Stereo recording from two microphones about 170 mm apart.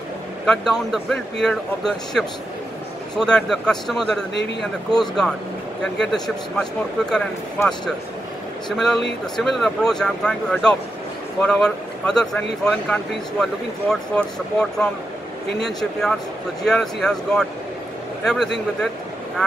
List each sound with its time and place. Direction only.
0.5 s speech: centre (ahead or behind)
4.3 s a man's voice: 90° left
4.9 s speech: 5° left (ahead or behind)